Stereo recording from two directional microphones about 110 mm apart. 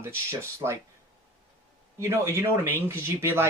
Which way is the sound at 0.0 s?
25° right (ahead or behind).